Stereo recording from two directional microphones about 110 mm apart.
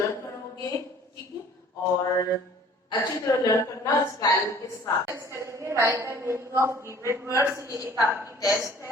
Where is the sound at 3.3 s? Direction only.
30° left (ahead or behind).